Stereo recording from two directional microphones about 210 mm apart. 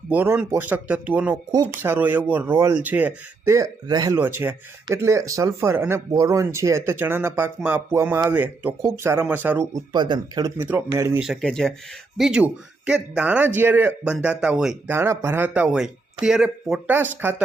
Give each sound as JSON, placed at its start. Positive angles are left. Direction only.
{"t": 0.1, "sound": "speech", "side_deg": -10}
{"t": 9.9, "sound": "speech", "side_deg": -20}
{"t": 11.2, "sound": "speech", "side_deg": 0}